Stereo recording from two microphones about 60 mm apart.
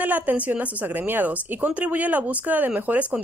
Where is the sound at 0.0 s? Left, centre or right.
Right.